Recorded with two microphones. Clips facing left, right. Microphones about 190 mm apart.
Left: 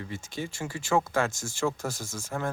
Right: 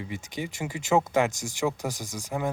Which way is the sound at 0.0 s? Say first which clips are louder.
Right 1 dB; 15° right (ahead or behind).